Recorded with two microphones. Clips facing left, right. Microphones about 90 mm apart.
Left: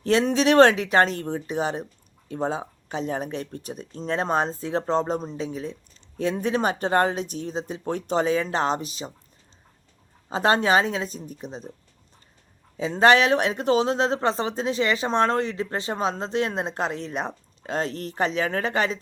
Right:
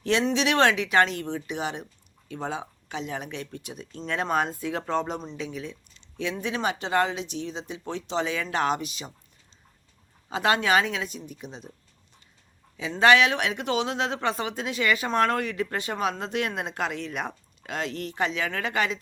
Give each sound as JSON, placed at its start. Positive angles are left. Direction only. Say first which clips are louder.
{"t": 0.0, "sound": "speech", "louder": "left 4 dB", "side_deg": 35}
{"t": 10.2, "sound": "speech", "louder": "left 3 dB", "side_deg": 35}
{"t": 12.7, "sound": "speech", "louder": "left 2 dB", "side_deg": 35}